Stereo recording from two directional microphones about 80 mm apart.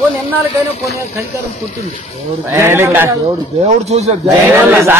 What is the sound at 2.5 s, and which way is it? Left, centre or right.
Speech, right.